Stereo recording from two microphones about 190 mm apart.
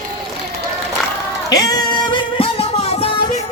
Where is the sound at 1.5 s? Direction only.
20° left (ahead or behind).